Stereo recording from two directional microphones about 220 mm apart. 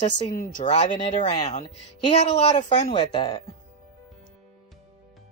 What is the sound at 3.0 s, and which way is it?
Speech, 20° left (ahead or behind).